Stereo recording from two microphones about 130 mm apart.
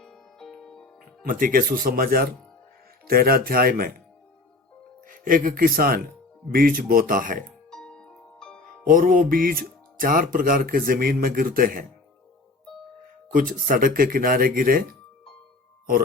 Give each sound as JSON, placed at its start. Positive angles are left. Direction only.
{"t": 0.0, "sound": "music", "side_deg": 5}
{"t": 1.3, "sound": "speech", "side_deg": -90}
{"t": 3.3, "sound": "speech", "side_deg": -90}
{"t": 5.0, "sound": "speech", "side_deg": -90}
{"t": 7.7, "sound": "music", "side_deg": 5}
{"t": 8.9, "sound": "speech", "side_deg": -90}
{"t": 13.3, "sound": "speech", "side_deg": -90}